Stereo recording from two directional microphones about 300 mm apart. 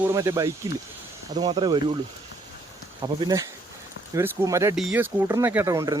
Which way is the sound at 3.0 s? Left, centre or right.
Centre.